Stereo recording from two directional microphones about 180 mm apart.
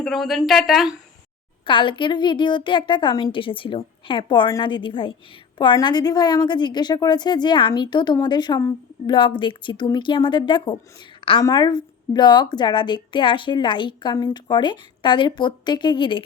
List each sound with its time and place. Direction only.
0.0 s a woman's voice: centre (ahead or behind)
1.6 s a woman's voice: 25° left (ahead or behind)